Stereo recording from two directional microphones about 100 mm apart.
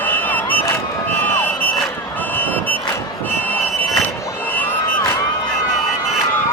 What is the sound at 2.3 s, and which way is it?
Vehicle, 20° left (ahead or behind).